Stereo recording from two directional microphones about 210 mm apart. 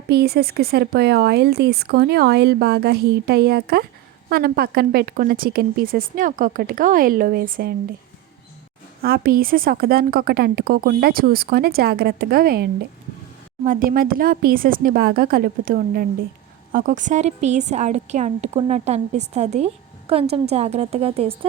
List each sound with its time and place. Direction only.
0.1 s a woman's voice: 50° right (ahead or behind)
9.0 s a woman's voice: 45° right (ahead or behind); by 21.3 s 30° right (ahead or behind)